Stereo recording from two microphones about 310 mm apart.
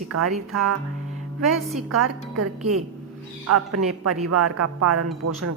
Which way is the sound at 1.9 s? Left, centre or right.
Right.